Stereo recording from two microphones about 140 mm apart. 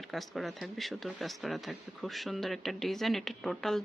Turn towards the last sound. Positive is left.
turn(degrees=5)  # may be behind; listen again after turning